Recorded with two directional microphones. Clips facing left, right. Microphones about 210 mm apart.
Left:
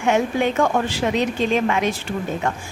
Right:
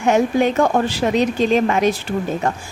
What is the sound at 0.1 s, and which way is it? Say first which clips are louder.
A woman's voice: right 4 dB; 40° right (ahead or behind).